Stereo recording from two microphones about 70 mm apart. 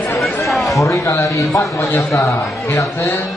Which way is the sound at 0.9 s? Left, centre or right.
Left.